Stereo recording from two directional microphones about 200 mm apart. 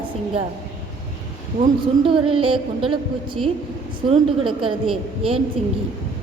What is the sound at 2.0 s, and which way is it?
Speech, 25° right (ahead or behind).